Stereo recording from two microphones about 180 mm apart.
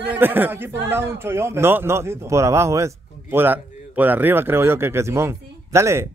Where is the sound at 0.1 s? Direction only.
10° right (ahead or behind).